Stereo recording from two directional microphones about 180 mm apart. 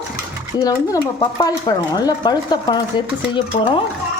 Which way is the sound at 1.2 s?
20° left (ahead or behind).